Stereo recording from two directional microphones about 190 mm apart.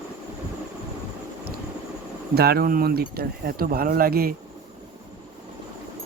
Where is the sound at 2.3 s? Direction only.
55° right (ahead or behind).